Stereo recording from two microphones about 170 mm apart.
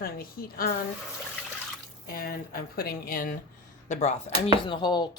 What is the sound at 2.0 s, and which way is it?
Speech, 60° left (ahead or behind).